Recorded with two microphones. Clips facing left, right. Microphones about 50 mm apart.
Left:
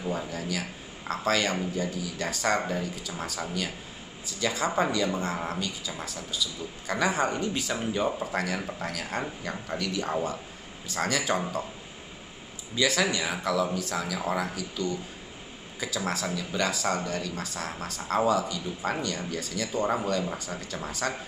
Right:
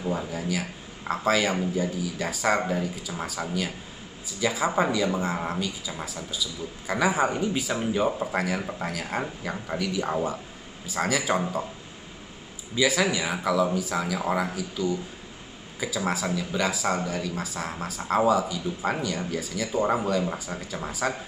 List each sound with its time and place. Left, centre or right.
0.0 s speech: centre
12.7 s speech: centre